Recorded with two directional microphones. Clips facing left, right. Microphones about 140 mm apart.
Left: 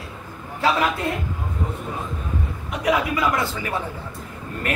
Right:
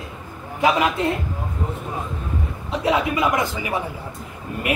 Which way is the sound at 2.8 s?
25° right (ahead or behind).